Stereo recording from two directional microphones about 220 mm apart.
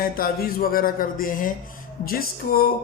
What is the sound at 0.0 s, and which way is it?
Speech, 40° left (ahead or behind).